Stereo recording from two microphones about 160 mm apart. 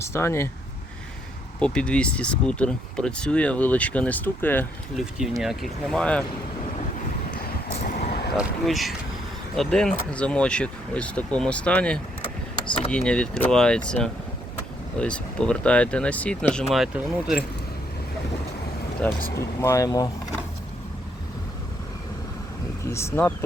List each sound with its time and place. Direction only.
0.0 s speech: 15° left (ahead or behind)
1.5 s speech: 5° left (ahead or behind)
4.9 s speech: centre (ahead or behind)
7.8 s vehicle: 70° left (ahead or behind)
8.4 s speech: 5° right (ahead or behind)
19.0 s speech: 10° left (ahead or behind)
22.9 s speech: 15° left (ahead or behind)